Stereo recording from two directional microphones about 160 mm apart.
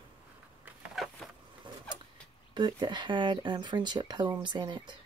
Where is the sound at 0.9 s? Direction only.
Centre (ahead or behind).